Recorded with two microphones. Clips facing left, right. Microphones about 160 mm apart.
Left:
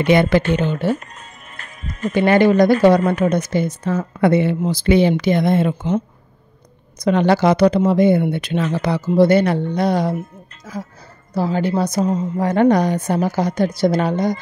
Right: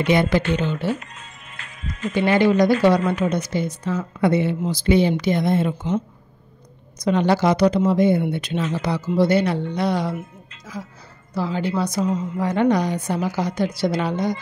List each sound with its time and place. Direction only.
0.0 s speech: 65° left (ahead or behind); by 14.4 s 45° left (ahead or behind)